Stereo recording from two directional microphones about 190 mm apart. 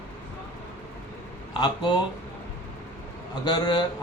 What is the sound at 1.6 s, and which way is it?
Speech, 20° left (ahead or behind).